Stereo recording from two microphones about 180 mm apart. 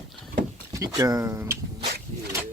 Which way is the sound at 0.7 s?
20° right (ahead or behind).